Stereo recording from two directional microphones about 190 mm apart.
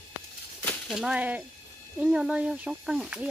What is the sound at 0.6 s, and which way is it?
Speech, centre (ahead or behind).